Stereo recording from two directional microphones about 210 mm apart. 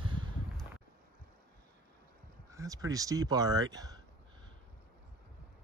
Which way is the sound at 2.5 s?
15° right (ahead or behind).